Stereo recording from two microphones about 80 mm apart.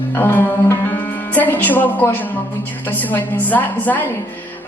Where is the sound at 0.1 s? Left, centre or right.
Left.